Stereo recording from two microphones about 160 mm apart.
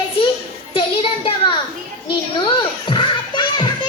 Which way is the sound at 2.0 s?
30° left (ahead or behind).